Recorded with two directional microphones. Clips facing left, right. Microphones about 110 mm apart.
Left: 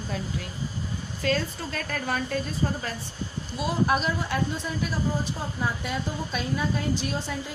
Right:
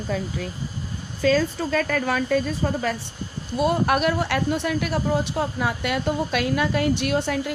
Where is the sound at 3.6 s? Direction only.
60° right (ahead or behind).